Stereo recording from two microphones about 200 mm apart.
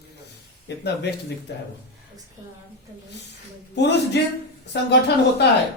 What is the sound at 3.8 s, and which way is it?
Speech, 60° left (ahead or behind).